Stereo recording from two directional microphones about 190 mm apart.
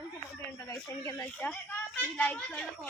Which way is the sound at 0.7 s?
15° left (ahead or behind).